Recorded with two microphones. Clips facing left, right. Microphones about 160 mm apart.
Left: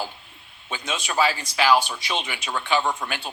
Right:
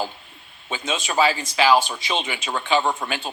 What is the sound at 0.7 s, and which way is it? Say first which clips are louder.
Speech: right 3 dB; 20° right (ahead or behind).